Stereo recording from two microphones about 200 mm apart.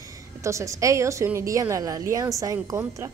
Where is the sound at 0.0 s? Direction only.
15° right (ahead or behind).